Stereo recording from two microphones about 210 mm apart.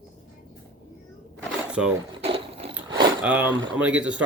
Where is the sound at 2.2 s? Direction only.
25° right (ahead or behind).